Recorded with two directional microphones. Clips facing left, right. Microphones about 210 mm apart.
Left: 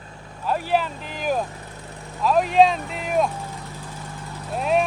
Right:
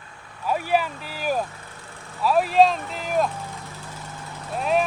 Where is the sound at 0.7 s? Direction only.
10° right (ahead or behind).